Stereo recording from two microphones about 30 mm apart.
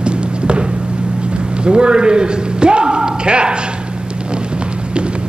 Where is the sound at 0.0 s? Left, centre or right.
Right.